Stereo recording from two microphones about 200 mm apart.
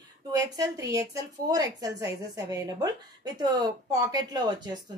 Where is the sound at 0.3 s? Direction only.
20° right (ahead or behind).